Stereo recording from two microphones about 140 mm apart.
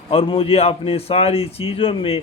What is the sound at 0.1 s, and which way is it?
A man's voice, 40° left (ahead or behind).